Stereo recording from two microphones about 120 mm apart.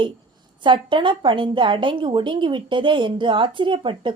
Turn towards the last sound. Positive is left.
turn(degrees=-45)  # may be behind; listen again after turning